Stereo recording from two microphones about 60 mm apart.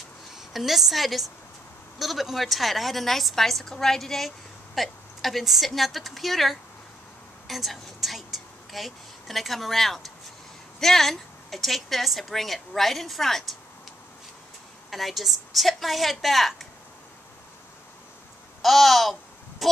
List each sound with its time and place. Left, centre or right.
0.4 s a woman's voice: centre
14.9 s a woman's voice: centre
18.6 s a woman's voice: centre
19.6 s a sound: centre